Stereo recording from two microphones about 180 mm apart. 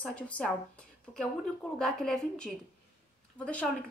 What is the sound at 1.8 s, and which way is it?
A woman's voice, 5° left (ahead or behind).